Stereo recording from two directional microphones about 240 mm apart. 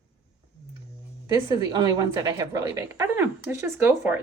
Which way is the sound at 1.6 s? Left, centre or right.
Centre.